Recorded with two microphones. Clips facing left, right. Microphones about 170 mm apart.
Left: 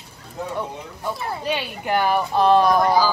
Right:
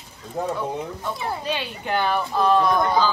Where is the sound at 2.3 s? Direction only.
25° left (ahead or behind).